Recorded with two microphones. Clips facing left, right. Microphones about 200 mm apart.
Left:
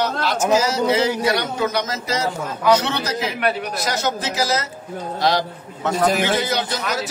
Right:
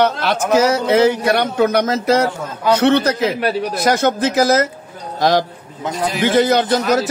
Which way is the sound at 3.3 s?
35° right (ahead or behind).